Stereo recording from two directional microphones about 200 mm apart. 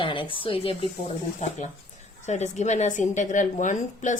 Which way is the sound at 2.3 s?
35° left (ahead or behind).